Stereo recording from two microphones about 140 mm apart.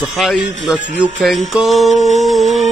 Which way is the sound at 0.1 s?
Centre (ahead or behind).